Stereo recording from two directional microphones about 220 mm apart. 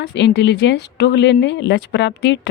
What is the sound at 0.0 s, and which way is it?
Speech, 50° left (ahead or behind).